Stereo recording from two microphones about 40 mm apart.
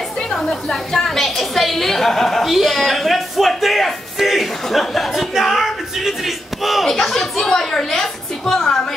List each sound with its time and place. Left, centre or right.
0.3 s a woman's voice: centre
6.9 s speech: centre
7.4 s a woman's voice: centre